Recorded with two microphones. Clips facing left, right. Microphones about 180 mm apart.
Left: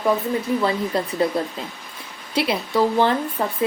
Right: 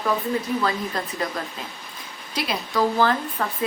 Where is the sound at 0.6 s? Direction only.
30° left (ahead or behind).